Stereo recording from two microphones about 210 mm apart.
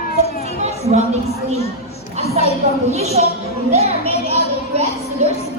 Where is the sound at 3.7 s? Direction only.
30° right (ahead or behind).